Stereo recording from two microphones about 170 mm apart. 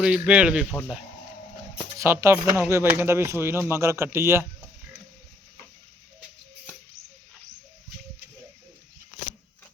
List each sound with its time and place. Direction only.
0.0 s speech: 5° right (ahead or behind)
2.0 s speech: 15° right (ahead or behind)